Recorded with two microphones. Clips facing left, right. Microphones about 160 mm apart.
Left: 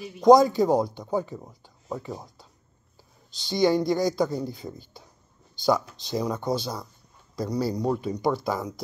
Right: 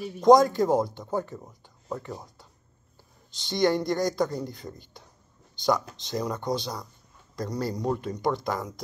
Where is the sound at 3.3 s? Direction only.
Centre (ahead or behind).